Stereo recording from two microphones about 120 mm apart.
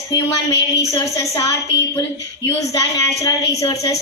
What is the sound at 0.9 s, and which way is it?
A woman's voice, 25° left (ahead or behind).